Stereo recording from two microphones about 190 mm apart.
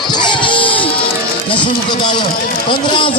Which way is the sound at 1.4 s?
25° left (ahead or behind).